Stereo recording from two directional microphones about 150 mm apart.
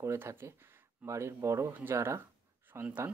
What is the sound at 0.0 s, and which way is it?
Speech, 20° right (ahead or behind).